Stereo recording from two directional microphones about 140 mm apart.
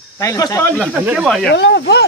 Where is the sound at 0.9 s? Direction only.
5° right (ahead or behind).